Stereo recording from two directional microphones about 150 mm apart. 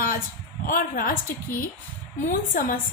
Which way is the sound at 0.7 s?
70° left (ahead or behind).